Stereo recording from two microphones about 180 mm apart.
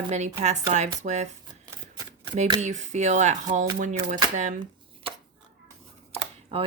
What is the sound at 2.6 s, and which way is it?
Speech, 40° right (ahead or behind).